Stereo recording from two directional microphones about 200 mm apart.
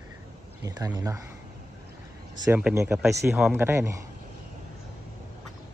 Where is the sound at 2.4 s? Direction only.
10° right (ahead or behind).